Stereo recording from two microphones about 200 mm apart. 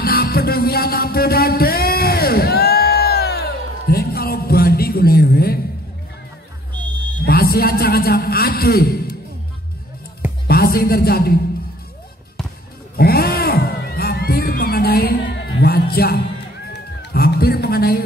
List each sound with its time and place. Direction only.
0.0 s music: 50° left (ahead or behind)
7.2 s a man's voice: 50° left (ahead or behind)
10.4 s a man's voice: 50° left (ahead or behind)
12.9 s a sound: 50° left (ahead or behind)
17.1 s music: 50° left (ahead or behind)